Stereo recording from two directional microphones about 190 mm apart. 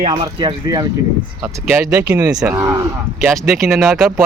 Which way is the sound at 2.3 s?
5° right (ahead or behind).